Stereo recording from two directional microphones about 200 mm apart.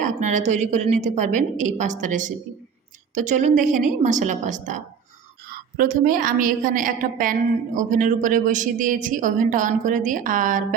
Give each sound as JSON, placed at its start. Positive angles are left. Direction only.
{"t": 0.0, "sound": "a woman's voice", "side_deg": -40}